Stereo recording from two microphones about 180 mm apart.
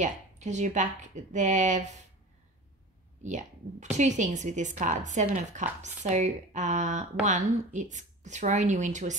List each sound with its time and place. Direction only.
0.0 s speech: 40° right (ahead or behind)
3.2 s speech: 40° right (ahead or behind)